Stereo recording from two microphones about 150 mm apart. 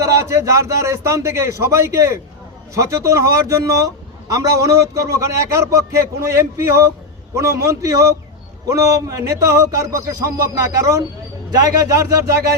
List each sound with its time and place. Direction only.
0.0 s a man's voice: 20° right (ahead or behind)